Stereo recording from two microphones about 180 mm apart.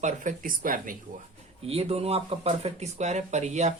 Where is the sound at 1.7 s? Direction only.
35° right (ahead or behind).